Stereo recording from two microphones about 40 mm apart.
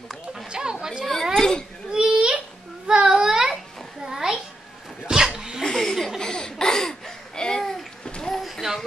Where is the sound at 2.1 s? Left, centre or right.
Right.